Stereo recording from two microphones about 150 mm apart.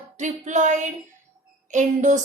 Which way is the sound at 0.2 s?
55° right (ahead or behind).